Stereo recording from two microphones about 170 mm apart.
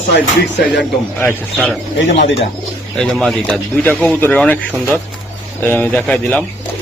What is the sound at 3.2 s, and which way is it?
Speech, centre (ahead or behind).